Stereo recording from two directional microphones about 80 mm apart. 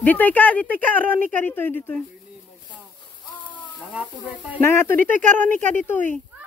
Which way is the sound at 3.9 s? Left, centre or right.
Centre.